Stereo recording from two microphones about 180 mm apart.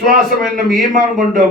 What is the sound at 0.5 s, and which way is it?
Speech, 50° right (ahead or behind).